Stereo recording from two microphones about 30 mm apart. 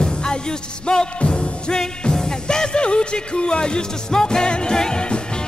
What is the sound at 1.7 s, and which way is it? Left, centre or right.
Music, left.